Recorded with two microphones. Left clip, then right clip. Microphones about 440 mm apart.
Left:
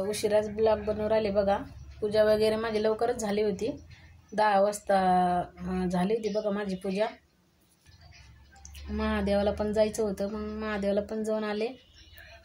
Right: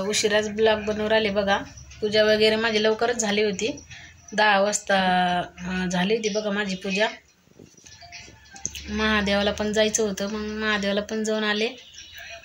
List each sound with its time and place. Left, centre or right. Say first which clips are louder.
0.1 s speech: right 5 dB; left
8.9 s speech: right 6 dB; left